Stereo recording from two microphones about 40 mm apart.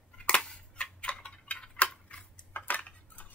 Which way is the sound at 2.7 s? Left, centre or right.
Left.